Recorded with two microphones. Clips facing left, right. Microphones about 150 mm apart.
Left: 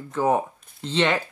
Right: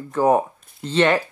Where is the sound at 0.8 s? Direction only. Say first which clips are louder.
Right 5 dB; 10° right (ahead or behind).